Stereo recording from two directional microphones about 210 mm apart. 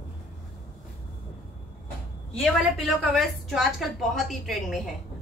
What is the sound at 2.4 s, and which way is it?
A woman's voice, centre (ahead or behind).